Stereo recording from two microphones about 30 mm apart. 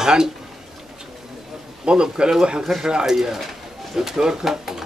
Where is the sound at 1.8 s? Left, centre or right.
Right.